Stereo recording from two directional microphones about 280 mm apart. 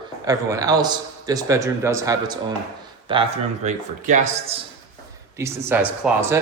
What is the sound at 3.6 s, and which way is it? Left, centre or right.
Speech, right.